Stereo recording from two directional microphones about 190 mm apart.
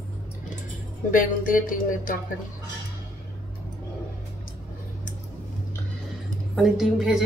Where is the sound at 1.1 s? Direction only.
45° left (ahead or behind).